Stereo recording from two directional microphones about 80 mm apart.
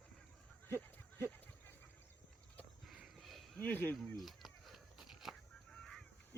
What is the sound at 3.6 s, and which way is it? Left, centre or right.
Speech, left.